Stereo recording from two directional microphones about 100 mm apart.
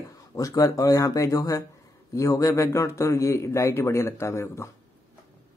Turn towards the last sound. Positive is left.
turn(degrees=25)  # may be behind; listen again after turning